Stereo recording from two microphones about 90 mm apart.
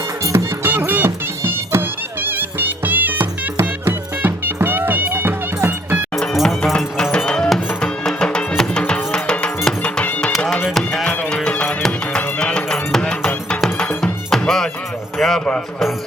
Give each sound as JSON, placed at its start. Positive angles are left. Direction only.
{"t": 0.3, "sound": "music", "side_deg": -25}
{"t": 6.1, "sound": "music", "side_deg": 0}
{"t": 10.8, "sound": "music", "side_deg": 5}
{"t": 15.2, "sound": "a sound", "side_deg": 5}